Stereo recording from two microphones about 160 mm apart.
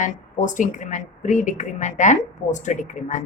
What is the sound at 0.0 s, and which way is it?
A woman's voice, 55° left (ahead or behind).